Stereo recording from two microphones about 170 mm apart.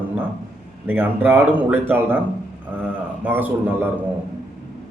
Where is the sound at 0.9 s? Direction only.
10° right (ahead or behind).